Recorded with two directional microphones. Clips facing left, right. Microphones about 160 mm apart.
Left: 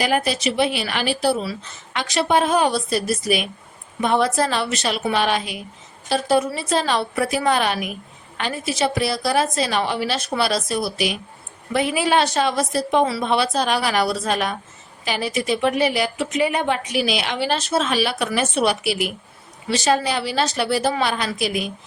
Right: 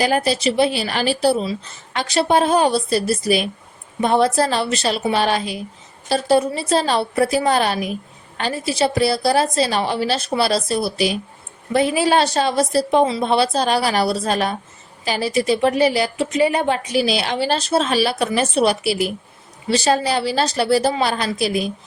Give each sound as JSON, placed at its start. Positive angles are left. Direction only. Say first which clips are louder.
{"t": 0.0, "sound": "a woman's voice", "louder": "right 3 dB", "side_deg": -35}